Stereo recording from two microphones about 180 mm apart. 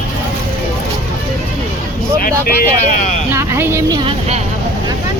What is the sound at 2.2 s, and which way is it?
Speech, 50° left (ahead or behind).